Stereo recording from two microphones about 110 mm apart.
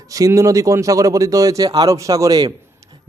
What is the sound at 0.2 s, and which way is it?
A man's voice, 30° right (ahead or behind).